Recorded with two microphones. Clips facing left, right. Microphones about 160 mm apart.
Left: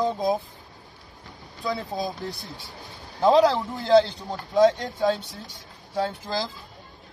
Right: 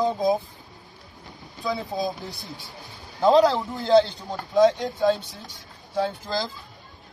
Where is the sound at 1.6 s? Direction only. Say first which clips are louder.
Right 1 dB; centre (ahead or behind).